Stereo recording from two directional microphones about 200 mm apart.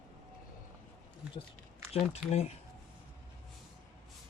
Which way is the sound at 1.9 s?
30° left (ahead or behind).